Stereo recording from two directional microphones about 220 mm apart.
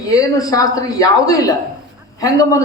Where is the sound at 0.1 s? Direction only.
15° left (ahead or behind).